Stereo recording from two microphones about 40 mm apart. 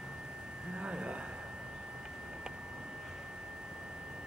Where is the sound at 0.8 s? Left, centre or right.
Right.